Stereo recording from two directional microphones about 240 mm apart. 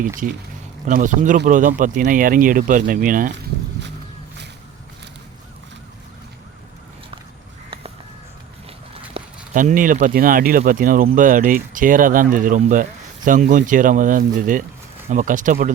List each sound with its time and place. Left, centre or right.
0.9 s speech: right
9.1 s speech: right